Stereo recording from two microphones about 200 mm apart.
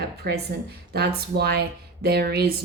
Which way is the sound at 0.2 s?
50° right (ahead or behind).